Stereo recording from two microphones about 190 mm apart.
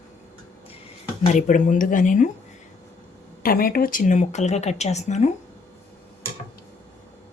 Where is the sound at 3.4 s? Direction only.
50° left (ahead or behind).